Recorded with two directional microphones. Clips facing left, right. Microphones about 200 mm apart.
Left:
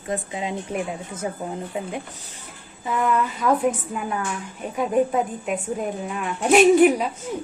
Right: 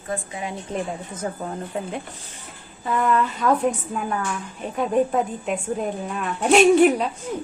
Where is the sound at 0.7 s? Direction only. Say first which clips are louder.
Even; 10° left (ahead or behind).